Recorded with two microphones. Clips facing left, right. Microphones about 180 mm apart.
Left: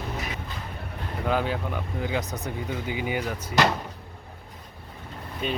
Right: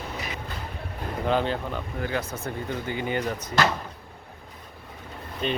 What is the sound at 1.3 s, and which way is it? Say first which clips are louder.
Speech: right 1 dB; 5° left (ahead or behind).